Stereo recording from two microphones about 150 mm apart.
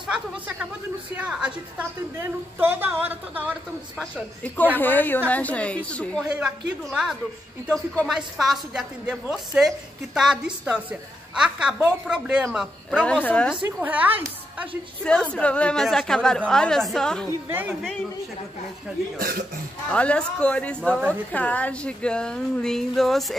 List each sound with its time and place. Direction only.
0.0 s a woman's voice: 5° right (ahead or behind)
4.0 s a man's voice: 10° left (ahead or behind)
6.3 s a woman's voice: 5° right (ahead or behind)
7.6 s a man's voice: 10° left (ahead or behind)
8.1 s a woman's voice: centre (ahead or behind)
13.0 s a man's voice: 10° left (ahead or behind)
13.7 s a woman's voice: 10° right (ahead or behind)
15.3 s a woman's voice: 10° left (ahead or behind)
17.5 s a woman's voice: 10° right (ahead or behind)
19.1 s speech: 80° right
19.9 s a man's voice: 5° left (ahead or behind)